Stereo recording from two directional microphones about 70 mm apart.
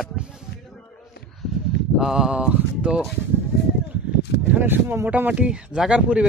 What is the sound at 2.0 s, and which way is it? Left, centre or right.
Speech, centre.